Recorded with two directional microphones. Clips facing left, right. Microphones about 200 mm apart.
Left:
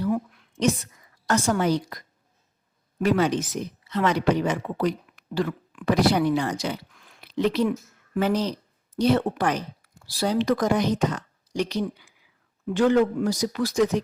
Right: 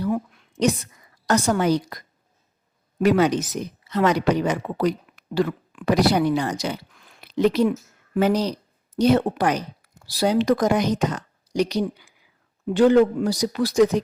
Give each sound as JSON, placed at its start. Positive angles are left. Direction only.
{"t": 1.3, "sound": "speech", "side_deg": -40}
{"t": 3.0, "sound": "speech", "side_deg": -40}